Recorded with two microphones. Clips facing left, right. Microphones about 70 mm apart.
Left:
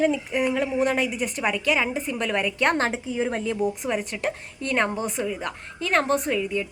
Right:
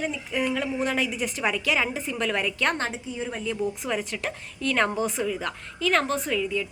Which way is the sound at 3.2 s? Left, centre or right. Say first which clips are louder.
Left 4 dB; left.